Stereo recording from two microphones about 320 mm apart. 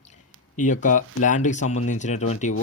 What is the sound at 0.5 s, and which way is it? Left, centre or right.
Speech, left.